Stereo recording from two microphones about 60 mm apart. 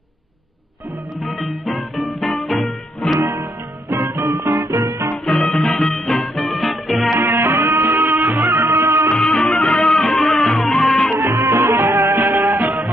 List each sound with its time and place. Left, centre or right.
1.2 s music: centre
3.2 s music: right
4.3 s music: right
5.2 s music: centre
7.2 s music: right
9.2 s music: centre
11.1 s music: right